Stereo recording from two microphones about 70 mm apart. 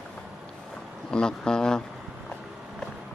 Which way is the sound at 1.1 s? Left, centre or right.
Centre.